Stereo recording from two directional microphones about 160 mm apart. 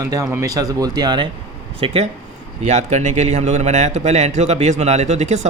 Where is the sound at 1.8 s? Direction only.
35° right (ahead or behind).